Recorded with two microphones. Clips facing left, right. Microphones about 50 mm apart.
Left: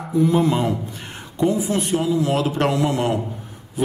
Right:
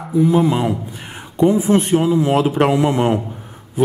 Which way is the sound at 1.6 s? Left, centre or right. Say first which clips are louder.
Right 6 dB; right.